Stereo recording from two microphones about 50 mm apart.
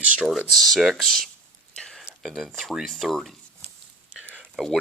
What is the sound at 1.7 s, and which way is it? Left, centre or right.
Whispering, centre.